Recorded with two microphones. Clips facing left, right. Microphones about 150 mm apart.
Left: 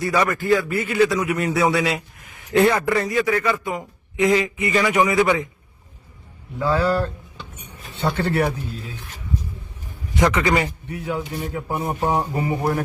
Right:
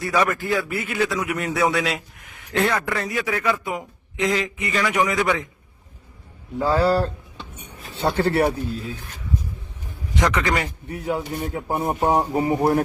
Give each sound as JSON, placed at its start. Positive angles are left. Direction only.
{"t": 0.0, "sound": "a man's voice", "side_deg": 0}
{"t": 3.1, "sound": "speech", "side_deg": -5}
{"t": 4.2, "sound": "a man's voice", "side_deg": 5}
{"t": 6.6, "sound": "a man's voice", "side_deg": -35}
{"t": 10.2, "sound": "a man's voice", "side_deg": 15}
{"t": 10.9, "sound": "a man's voice", "side_deg": -40}
{"t": 11.5, "sound": "a man's voice", "side_deg": -25}